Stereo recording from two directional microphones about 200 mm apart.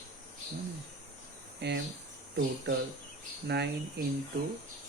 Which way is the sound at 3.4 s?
55° right (ahead or behind).